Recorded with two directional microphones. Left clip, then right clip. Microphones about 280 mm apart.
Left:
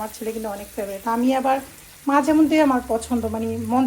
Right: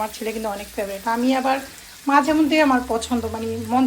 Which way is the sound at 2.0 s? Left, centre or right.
Centre.